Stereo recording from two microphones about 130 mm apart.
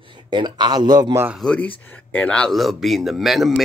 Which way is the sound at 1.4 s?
10° left (ahead or behind).